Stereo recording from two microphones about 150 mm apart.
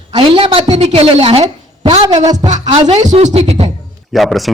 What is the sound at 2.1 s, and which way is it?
Speech, 25° right (ahead or behind).